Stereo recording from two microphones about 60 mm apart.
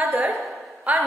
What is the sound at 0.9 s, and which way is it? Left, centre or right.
Speech, right.